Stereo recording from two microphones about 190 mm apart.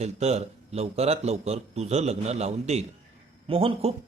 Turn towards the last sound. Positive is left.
turn(degrees=-30)  # may be behind; listen again after turning